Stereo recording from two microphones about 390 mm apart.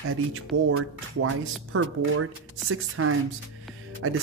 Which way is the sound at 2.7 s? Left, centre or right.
Right.